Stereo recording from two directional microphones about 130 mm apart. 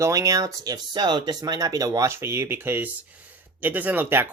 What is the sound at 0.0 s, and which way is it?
Speech, 25° right (ahead or behind).